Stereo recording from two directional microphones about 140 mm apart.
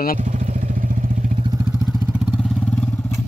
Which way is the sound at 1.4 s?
30° right (ahead or behind).